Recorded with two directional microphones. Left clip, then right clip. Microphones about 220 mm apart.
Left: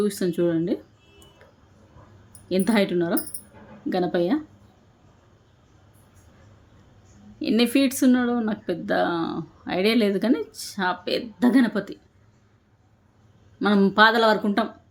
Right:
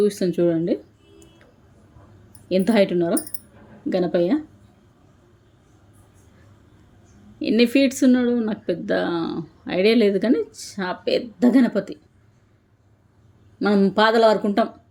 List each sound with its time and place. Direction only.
0.0 s speech: centre (ahead or behind)
2.5 s speech: centre (ahead or behind)
7.3 s speech: 5° left (ahead or behind)
13.6 s speech: 5° left (ahead or behind)